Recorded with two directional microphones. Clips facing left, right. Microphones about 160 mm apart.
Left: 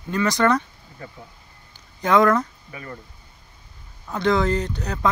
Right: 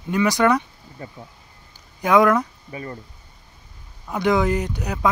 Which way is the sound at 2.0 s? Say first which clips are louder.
Right 1 dB; 10° right (ahead or behind).